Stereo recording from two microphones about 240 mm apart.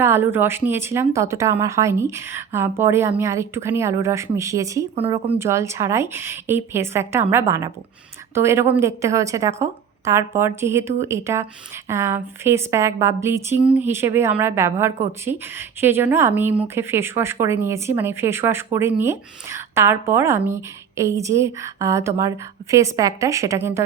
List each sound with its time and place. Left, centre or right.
0.0 s a woman's voice: centre
5.4 s a woman's voice: centre